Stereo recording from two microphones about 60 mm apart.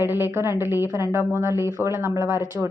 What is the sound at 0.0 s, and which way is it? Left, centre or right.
Speech, right.